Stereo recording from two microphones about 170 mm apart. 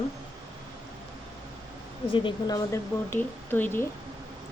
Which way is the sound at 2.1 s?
25° left (ahead or behind).